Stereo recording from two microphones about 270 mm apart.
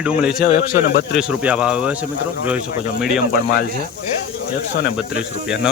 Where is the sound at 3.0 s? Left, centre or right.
Centre.